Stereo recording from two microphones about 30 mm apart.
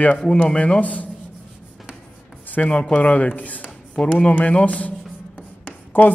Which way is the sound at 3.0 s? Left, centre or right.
Left.